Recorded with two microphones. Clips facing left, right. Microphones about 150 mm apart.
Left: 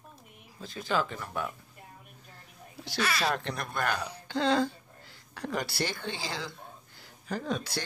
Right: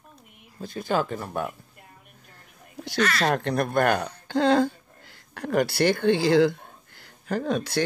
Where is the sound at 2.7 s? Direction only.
50° right (ahead or behind).